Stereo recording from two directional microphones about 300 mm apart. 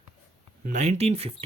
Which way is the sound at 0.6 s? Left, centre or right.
Right.